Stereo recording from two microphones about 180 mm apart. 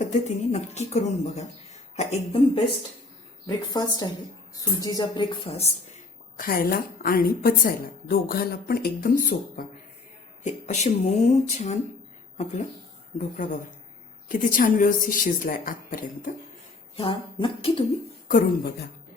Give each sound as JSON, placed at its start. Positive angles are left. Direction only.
{"t": 0.0, "sound": "speech", "side_deg": 40}
{"t": 3.4, "sound": "speech", "side_deg": 20}
{"t": 6.3, "sound": "a woman's voice", "side_deg": 50}
{"t": 17.0, "sound": "speech", "side_deg": 30}
{"t": 18.3, "sound": "a woman's voice", "side_deg": 50}